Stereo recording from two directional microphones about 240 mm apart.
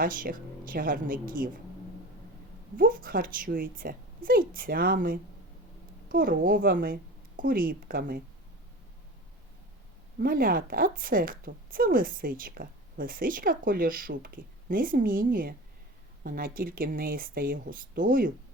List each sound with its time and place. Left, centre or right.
0.0 s a woman's voice: right
2.7 s a woman's voice: right
10.2 s a woman's voice: right